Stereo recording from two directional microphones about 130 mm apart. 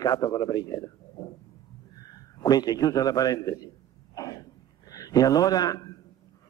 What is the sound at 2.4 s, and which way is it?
A man's voice, 30° left (ahead or behind).